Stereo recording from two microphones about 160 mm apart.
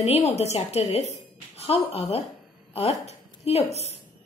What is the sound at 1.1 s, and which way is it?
Music, 40° left (ahead or behind).